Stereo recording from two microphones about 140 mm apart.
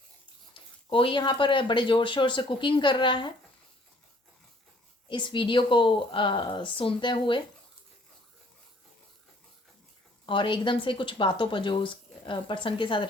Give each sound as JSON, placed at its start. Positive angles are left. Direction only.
{"t": 0.5, "sound": "speech", "side_deg": 40}
{"t": 5.0, "sound": "speech", "side_deg": 35}
{"t": 10.2, "sound": "speech", "side_deg": 35}